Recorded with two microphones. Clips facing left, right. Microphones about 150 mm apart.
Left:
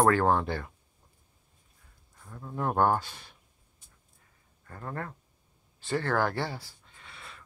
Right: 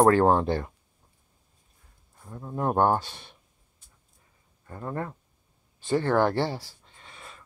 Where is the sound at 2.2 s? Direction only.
25° right (ahead or behind).